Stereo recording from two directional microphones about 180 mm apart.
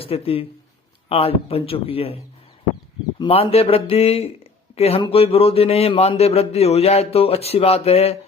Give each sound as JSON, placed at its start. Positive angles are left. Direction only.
{"t": 0.0, "sound": "a man's voice", "side_deg": 35}